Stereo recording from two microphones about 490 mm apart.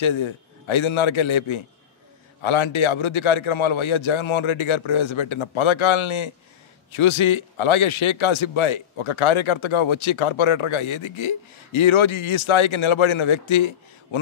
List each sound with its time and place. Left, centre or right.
0.0 s a man's voice: left